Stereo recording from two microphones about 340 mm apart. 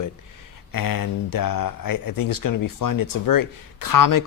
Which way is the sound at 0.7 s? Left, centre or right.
Left.